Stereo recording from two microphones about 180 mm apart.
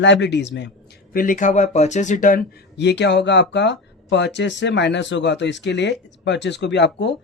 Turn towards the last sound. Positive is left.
turn(degrees=75)  # may be behind; listen again after turning